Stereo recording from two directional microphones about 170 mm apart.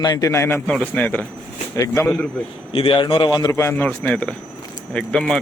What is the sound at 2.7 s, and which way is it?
A man's voice, 35° left (ahead or behind).